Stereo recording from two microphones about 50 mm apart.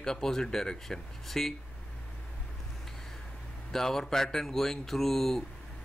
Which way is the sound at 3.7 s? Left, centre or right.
Centre.